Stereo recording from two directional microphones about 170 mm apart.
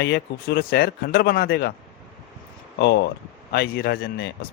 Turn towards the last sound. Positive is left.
turn(degrees=65)  # may be behind; listen again after turning